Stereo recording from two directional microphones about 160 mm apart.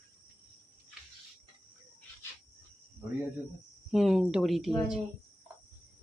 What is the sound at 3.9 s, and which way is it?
Speech, centre (ahead or behind).